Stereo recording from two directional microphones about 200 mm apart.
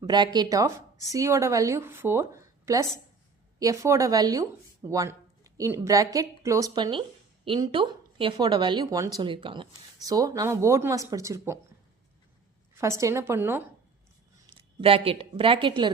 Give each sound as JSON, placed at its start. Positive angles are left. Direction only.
{"t": 0.0, "sound": "speech", "side_deg": -20}
{"t": 12.7, "sound": "speech", "side_deg": -15}
{"t": 14.5, "sound": "a woman's voice", "side_deg": -25}